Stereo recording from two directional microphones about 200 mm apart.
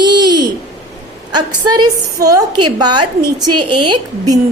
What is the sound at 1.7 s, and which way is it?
A woman's voice, 20° right (ahead or behind).